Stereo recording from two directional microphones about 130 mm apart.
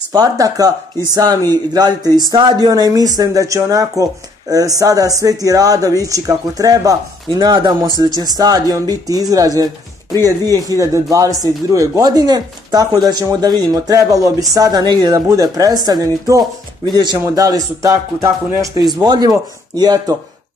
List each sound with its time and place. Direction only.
0.1 s speech: 25° right (ahead or behind)
7.2 s speech: 35° right (ahead or behind)
10.8 s speech: 25° right (ahead or behind)